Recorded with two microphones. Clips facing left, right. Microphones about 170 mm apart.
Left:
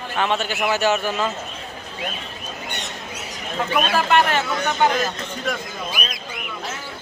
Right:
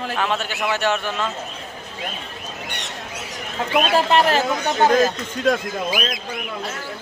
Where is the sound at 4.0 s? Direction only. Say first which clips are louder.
Right 1 dB; 30° right (ahead or behind).